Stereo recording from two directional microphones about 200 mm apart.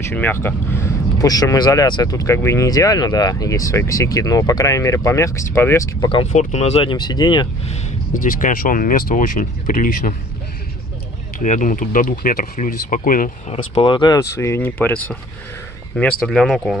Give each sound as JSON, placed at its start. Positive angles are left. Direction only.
{"t": 0.0, "sound": "speech", "side_deg": 10}
{"t": 6.3, "sound": "speech", "side_deg": 35}
{"t": 11.3, "sound": "speech", "side_deg": 40}
{"t": 13.7, "sound": "speech", "side_deg": 25}